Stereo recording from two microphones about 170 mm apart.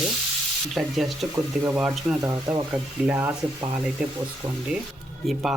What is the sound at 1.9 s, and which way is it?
Speech, 20° right (ahead or behind).